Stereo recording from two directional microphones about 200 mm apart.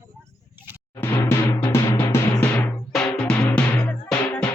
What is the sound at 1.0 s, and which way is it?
Timpani, 15° left (ahead or behind).